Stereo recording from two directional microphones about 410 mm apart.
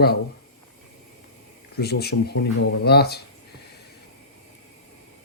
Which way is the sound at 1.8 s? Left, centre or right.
Left.